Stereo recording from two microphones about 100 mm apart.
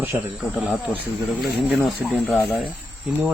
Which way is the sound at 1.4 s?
Centre (ahead or behind).